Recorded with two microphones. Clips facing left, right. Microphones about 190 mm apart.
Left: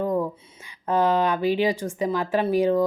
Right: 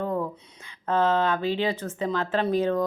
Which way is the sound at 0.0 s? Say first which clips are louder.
Left 4 dB; 10° left (ahead or behind).